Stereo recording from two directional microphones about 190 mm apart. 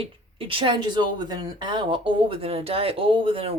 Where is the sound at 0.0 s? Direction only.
30° right (ahead or behind).